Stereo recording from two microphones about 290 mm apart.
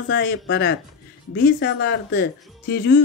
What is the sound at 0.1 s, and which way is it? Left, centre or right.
Speech, left.